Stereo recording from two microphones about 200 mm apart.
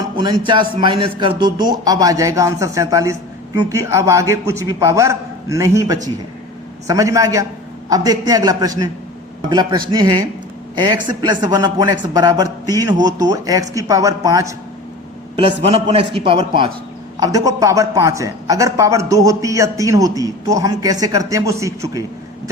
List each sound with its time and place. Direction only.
0.8 s a man's voice: 25° right (ahead or behind)
15.4 s a man's voice: 30° right (ahead or behind); by 22.0 s 15° right (ahead or behind)